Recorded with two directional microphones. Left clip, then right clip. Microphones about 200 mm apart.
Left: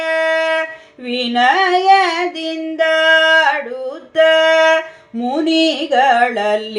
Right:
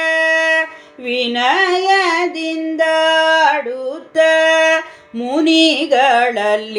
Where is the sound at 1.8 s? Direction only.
10° right (ahead or behind).